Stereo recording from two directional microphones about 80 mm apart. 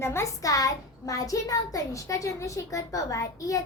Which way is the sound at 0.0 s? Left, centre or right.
Left.